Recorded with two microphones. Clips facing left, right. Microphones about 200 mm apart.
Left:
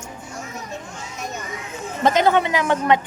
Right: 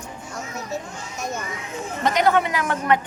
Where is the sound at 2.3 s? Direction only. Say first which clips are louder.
Left 3 dB; 25° left (ahead or behind).